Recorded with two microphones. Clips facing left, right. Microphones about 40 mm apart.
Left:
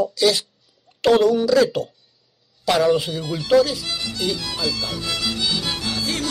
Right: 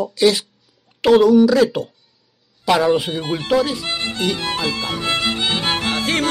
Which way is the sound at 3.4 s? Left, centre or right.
Right.